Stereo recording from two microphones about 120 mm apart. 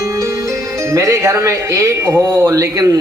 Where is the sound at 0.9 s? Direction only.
25° right (ahead or behind).